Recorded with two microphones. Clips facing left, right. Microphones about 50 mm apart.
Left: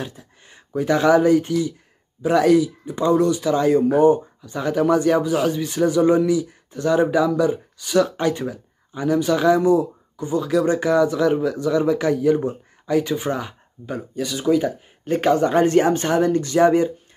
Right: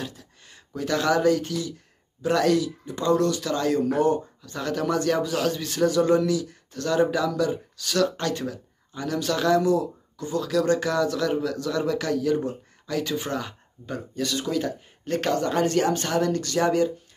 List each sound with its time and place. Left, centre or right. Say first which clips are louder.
0.0 s speech: left 3 dB; left